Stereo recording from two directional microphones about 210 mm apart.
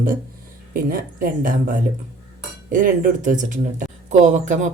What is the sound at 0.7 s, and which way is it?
Speech, 40° right (ahead or behind).